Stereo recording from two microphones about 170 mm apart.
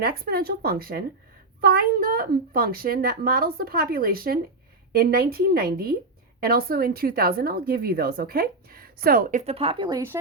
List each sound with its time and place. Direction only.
0.0 s a woman's voice: 65° right (ahead or behind)
9.4 s speech: 35° right (ahead or behind)